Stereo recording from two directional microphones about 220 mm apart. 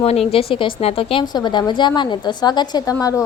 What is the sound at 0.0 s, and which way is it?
A woman's voice, 25° left (ahead or behind).